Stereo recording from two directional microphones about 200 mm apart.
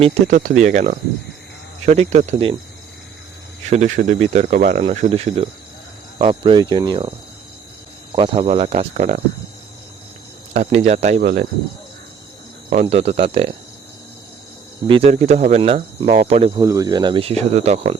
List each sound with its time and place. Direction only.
0.0 s speech: 35° right (ahead or behind)
3.7 s speech: 35° right (ahead or behind)
8.1 s speech: 25° right (ahead or behind)
10.5 s speech: 35° right (ahead or behind)
12.8 s speech: 30° right (ahead or behind)
14.8 s speech: 30° right (ahead or behind)
16.6 s speech: 15° right (ahead or behind); by 17.9 s 30° right (ahead or behind)